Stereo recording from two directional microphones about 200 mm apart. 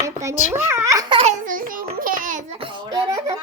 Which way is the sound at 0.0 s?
15° right (ahead or behind).